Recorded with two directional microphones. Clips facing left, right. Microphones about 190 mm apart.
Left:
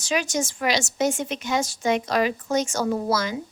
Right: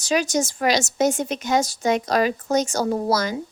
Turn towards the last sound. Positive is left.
turn(degrees=-40)  # may be behind; listen again after turning